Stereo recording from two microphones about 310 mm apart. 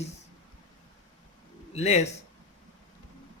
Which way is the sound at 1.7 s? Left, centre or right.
Left.